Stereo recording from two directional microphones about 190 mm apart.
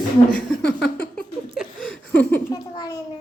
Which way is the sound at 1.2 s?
Centre (ahead or behind).